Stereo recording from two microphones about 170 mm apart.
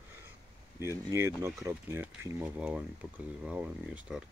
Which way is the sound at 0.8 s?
15° right (ahead or behind).